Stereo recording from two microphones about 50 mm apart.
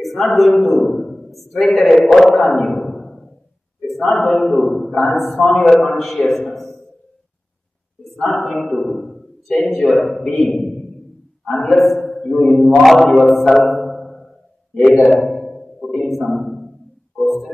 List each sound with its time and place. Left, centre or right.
0.0 s a man's voice: centre
3.8 s a sound: centre
4.1 s a man's voice: centre
4.6 s a man's voice: centre
6.4 s a sound: centre
8.5 s a man's voice: centre
11.4 s a man's voice: centre
12.3 s mantra: centre
12.8 s a man's voice: centre
13.7 s a sound: centre